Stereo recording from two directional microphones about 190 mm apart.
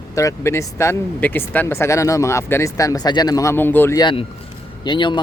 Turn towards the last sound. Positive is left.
turn(degrees=25)  # may be behind; listen again after turning